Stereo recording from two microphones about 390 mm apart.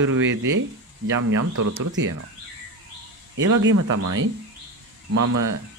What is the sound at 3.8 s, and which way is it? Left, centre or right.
Speech, right.